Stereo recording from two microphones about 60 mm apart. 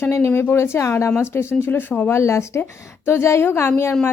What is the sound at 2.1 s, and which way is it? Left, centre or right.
A woman's voice, left.